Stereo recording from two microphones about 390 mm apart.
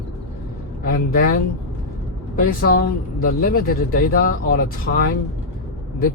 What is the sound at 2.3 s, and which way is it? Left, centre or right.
Speech, left.